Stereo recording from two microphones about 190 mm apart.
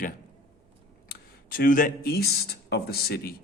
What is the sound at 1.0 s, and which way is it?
A man's voice, 50° left (ahead or behind).